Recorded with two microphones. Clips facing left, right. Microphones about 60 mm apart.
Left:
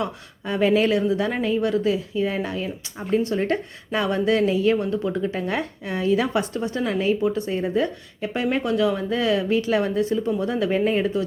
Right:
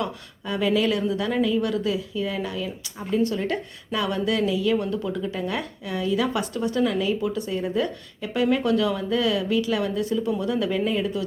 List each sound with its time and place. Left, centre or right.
0.0 s speech: left